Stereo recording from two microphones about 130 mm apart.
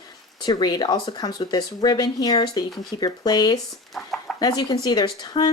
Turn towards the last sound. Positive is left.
turn(degrees=30)  # may be behind; listen again after turning